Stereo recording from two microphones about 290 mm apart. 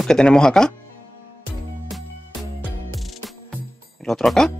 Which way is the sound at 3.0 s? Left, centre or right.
Centre.